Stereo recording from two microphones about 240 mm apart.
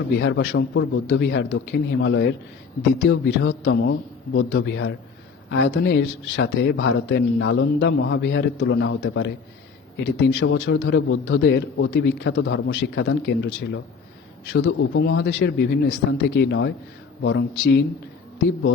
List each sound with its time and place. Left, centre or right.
0.2 s speech: left